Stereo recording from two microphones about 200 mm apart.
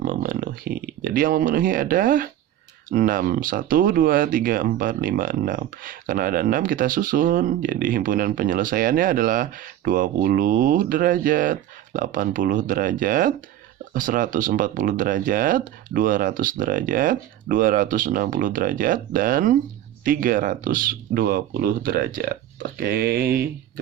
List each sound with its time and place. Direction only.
0.0 s speech: 45° right (ahead or behind)